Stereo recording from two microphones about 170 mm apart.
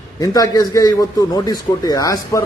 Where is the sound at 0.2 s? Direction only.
20° left (ahead or behind).